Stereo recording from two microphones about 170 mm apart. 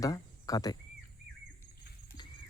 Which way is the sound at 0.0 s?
20° left (ahead or behind).